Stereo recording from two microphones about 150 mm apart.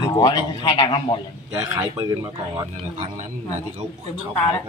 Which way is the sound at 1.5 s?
25° right (ahead or behind).